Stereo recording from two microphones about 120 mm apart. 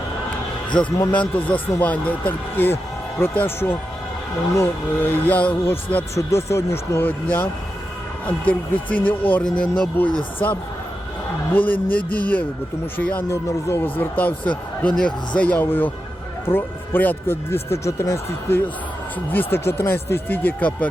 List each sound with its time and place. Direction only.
0.7 s speech: 5° left (ahead or behind)
6.1 s speech: 25° left (ahead or behind)
8.4 s speech: 15° left (ahead or behind)